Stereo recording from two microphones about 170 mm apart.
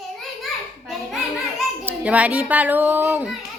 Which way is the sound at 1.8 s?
10° right (ahead or behind).